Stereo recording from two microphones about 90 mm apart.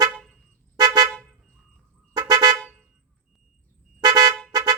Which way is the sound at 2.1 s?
50° right (ahead or behind).